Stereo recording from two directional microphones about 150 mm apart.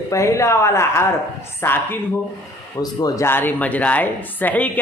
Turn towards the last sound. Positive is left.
turn(degrees=10)  # may be behind; listen again after turning